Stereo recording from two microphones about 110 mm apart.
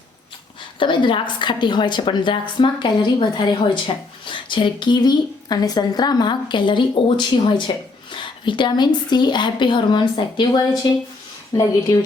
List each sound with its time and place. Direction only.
0.8 s a woman's voice: 50° left (ahead or behind)
11.5 s speech: 30° left (ahead or behind)